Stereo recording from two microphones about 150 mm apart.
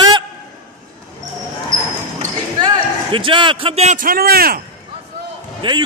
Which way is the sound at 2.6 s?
35° right (ahead or behind).